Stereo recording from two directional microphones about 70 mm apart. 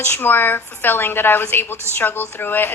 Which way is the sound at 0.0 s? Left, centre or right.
Left.